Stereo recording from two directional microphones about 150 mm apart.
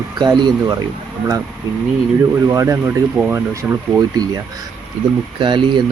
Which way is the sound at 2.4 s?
20° right (ahead or behind).